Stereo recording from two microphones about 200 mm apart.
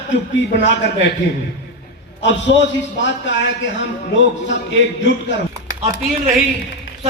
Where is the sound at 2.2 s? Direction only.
65° left (ahead or behind).